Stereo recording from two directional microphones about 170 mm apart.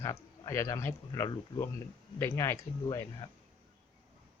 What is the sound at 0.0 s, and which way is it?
Speech, 20° left (ahead or behind).